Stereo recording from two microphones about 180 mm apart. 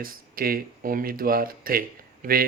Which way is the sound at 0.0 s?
55° right (ahead or behind).